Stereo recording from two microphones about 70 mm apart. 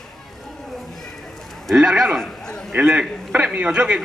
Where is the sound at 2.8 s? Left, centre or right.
Centre.